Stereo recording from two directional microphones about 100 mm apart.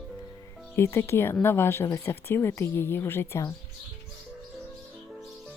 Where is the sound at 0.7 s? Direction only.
25° left (ahead or behind).